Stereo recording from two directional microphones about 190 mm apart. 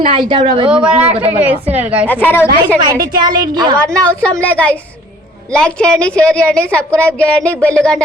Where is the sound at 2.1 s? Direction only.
10° left (ahead or behind).